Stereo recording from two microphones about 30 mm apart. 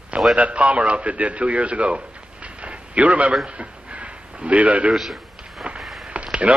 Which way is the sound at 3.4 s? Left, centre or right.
Right.